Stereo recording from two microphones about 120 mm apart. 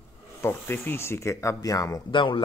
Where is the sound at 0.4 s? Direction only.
20° left (ahead or behind).